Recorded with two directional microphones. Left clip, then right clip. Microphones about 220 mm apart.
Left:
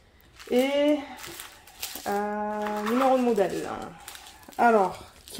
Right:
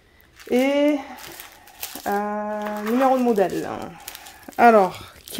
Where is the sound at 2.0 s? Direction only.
45° right (ahead or behind).